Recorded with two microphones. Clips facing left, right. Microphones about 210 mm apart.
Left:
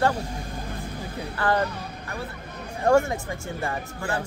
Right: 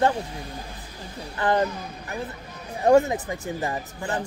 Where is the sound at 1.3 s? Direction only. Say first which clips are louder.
Right 2 dB; 20° right (ahead or behind).